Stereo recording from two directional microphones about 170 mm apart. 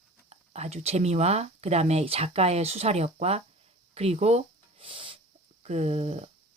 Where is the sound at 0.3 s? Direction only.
40° right (ahead or behind).